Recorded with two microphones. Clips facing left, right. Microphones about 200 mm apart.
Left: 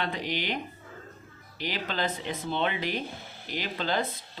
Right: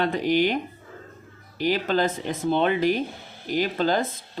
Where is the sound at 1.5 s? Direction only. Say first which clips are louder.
Right 10 dB; 45° right (ahead or behind).